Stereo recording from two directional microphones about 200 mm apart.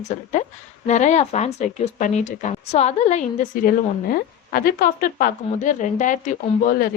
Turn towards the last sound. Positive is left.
turn(degrees=45)  # may be behind; listen again after turning